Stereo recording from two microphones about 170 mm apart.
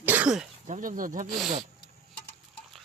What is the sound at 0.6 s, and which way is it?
Speech, 50° right (ahead or behind).